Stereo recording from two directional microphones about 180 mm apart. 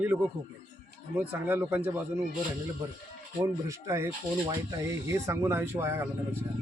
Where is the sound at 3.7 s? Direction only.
15° right (ahead or behind).